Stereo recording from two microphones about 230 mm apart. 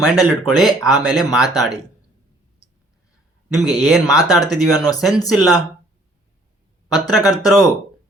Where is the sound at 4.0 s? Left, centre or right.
Centre.